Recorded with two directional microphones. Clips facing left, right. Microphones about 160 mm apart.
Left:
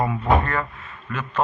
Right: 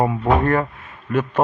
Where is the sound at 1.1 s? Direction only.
55° right (ahead or behind).